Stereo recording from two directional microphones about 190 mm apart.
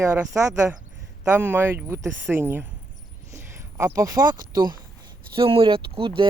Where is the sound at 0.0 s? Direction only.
15° right (ahead or behind).